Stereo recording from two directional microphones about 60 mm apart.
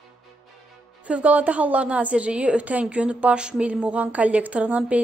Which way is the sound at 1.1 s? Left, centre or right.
Right.